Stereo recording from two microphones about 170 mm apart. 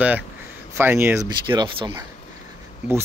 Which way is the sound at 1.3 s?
25° right (ahead or behind).